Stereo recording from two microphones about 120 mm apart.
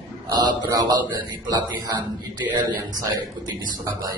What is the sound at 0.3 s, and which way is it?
Speech, 35° right (ahead or behind).